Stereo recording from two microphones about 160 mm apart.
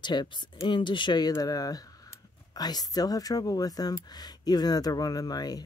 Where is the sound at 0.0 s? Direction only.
30° left (ahead or behind).